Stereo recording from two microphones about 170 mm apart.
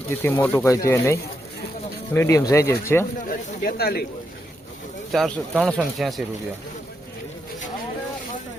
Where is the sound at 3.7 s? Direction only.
65° left (ahead or behind).